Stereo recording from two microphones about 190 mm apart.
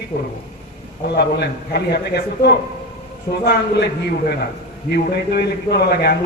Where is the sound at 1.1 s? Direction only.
55° left (ahead or behind).